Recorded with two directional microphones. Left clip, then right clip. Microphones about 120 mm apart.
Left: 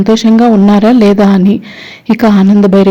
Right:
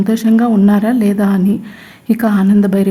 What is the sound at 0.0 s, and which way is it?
Speech, 25° left (ahead or behind).